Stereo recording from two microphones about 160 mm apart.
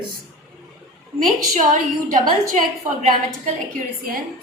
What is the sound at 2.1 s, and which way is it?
Speech, 50° right (ahead or behind).